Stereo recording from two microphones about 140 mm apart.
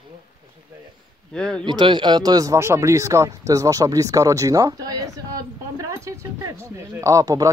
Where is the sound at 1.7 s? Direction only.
35° right (ahead or behind).